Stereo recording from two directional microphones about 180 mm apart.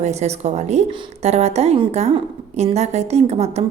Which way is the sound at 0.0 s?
40° right (ahead or behind).